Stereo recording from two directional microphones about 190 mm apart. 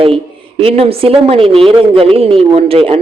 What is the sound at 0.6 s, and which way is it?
A man's voice, 30° right (ahead or behind).